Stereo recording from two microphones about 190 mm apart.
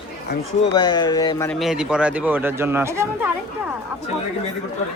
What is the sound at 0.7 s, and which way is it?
Speech, 25° left (ahead or behind).